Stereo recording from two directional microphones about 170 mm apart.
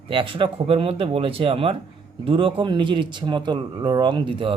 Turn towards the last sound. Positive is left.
turn(degrees=-30)  # may be behind; listen again after turning